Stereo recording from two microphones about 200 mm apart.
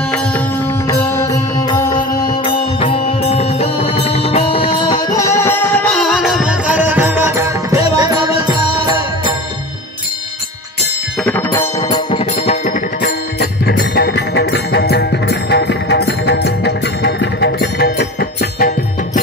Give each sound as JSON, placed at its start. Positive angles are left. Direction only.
{"t": 1.1, "sound": "music", "side_deg": 15}
{"t": 11.2, "sound": "music", "side_deg": 10}
{"t": 11.9, "sound": "music", "side_deg": 30}
{"t": 13.4, "sound": "music", "side_deg": 50}